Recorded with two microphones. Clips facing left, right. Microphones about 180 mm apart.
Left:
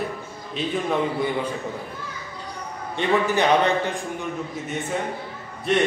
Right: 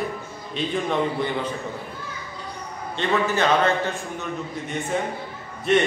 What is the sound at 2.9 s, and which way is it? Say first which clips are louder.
A man's voice: left 2 dB; 15° left (ahead or behind).